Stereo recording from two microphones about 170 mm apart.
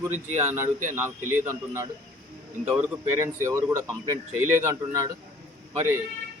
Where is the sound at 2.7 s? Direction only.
15° right (ahead or behind).